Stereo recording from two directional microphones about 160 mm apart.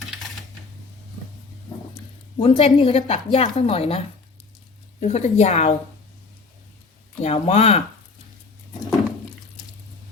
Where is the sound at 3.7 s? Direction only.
35° left (ahead or behind).